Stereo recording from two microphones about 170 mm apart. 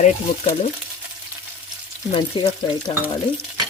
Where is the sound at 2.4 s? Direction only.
30° left (ahead or behind).